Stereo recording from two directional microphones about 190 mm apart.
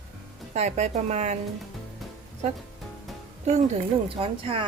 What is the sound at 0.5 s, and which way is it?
Speech, 35° right (ahead or behind).